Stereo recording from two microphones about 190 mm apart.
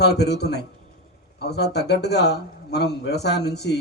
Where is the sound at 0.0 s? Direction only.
60° left (ahead or behind).